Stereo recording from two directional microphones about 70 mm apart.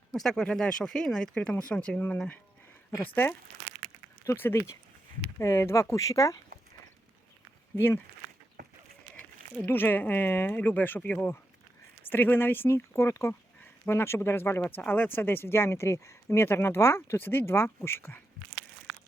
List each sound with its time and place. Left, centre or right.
0.1 s speech: centre; by 3.3 s left
4.5 s speech: left
7.8 s speech: left
9.6 s speech: left